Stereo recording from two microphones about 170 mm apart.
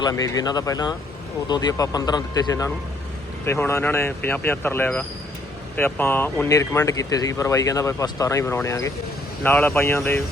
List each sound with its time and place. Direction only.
0.0 s speech: 20° left (ahead or behind)